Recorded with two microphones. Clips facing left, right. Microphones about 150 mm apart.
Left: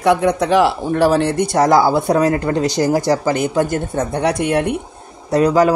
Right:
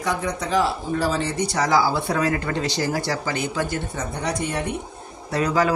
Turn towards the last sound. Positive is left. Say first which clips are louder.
# left 8 dB
turn(degrees=45)  # may be behind; listen again after turning